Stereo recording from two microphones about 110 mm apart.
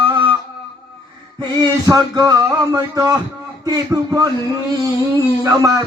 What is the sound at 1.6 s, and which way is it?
Speech, 35° right (ahead or behind).